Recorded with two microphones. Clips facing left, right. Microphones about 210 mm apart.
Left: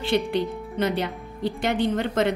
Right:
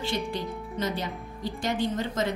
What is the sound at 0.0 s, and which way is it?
A woman's voice, 60° left (ahead or behind).